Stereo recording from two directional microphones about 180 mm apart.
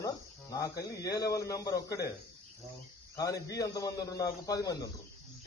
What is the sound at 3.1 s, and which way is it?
Speech, 20° left (ahead or behind).